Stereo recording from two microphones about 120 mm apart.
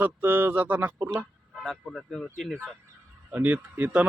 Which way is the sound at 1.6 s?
5° left (ahead or behind).